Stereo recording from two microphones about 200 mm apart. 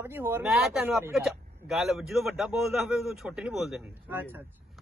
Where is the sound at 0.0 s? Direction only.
10° right (ahead or behind).